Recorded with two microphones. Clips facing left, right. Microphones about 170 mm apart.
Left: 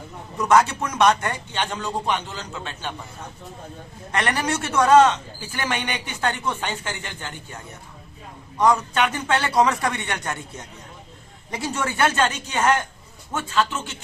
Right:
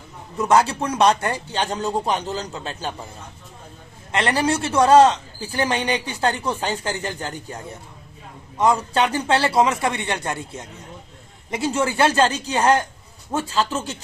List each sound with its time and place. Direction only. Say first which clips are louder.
0.4 s a man's voice: even; 30° right (ahead or behind)
4.1 s a man's voice: right 3 dB; 25° right (ahead or behind)